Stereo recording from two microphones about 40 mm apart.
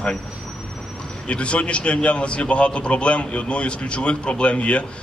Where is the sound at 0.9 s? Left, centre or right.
Left.